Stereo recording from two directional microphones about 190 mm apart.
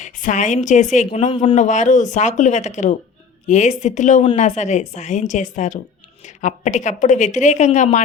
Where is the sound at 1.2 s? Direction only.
25° left (ahead or behind).